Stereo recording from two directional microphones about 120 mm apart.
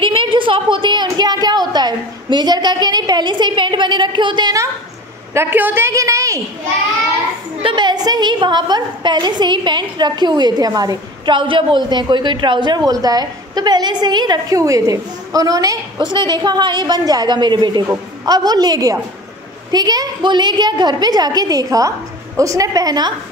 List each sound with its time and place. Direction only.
0.0 s a sound: 45° right (ahead or behind)
1.7 s a woman's voice: 35° right (ahead or behind)
5.3 s a man's voice: 20° right (ahead or behind)
7.6 s a woman's voice: 40° right (ahead or behind)
17.8 s a woman's voice: 25° right (ahead or behind)